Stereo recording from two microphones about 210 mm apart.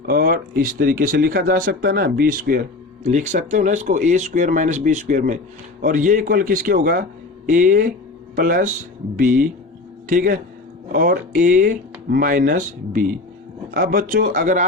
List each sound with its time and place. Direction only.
0.0 s speech: 45° right (ahead or behind)